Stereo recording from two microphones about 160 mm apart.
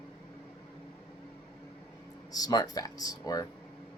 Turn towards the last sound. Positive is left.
turn(degrees=25)  # may be behind; listen again after turning